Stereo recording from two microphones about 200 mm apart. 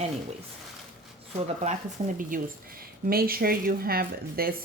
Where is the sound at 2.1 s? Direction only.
45° right (ahead or behind).